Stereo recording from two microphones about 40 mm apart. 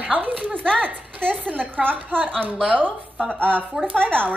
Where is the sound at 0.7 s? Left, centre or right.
Right.